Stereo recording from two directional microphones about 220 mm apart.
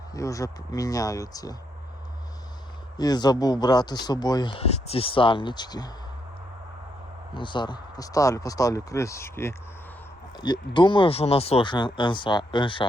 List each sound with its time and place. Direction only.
0.1 s speech: 15° left (ahead or behind)
3.0 s speech: 15° left (ahead or behind)
7.3 s speech: 20° left (ahead or behind)